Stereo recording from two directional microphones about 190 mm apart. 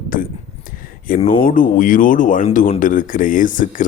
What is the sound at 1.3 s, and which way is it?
Speech, 45° left (ahead or behind).